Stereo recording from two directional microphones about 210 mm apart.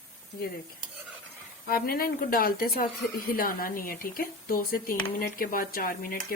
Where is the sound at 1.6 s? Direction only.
45° left (ahead or behind).